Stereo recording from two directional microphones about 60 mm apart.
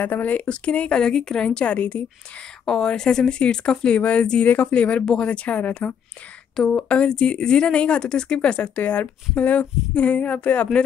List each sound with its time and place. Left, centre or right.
0.0 s speech: left
0.5 s speech: centre
2.6 s speech: centre